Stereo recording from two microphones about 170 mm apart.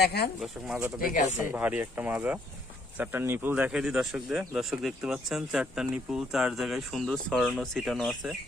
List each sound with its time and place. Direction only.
0.0 s speech: 70° left (ahead or behind)
0.3 s speech: centre (ahead or behind)
0.9 s speech: 55° left (ahead or behind)
1.5 s speech: 10° right (ahead or behind)